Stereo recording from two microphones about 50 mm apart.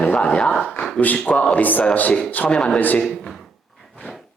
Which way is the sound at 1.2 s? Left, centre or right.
Left.